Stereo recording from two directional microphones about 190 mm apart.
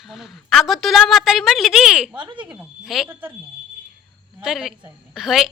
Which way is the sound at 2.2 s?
25° right (ahead or behind).